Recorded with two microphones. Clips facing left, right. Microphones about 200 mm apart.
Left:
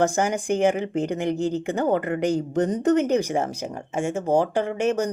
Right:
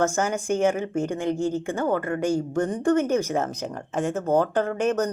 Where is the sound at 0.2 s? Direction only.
15° left (ahead or behind).